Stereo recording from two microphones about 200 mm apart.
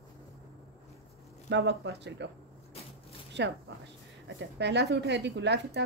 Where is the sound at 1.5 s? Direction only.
60° right (ahead or behind).